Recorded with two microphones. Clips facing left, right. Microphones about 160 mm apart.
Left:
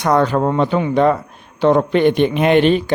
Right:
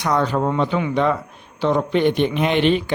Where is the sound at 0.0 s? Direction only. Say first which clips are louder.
Left 4 dB; 55° left (ahead or behind).